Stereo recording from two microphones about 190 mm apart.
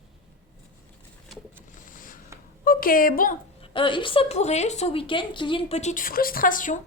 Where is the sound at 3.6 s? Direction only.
25° left (ahead or behind); by 6.8 s 45° left (ahead or behind).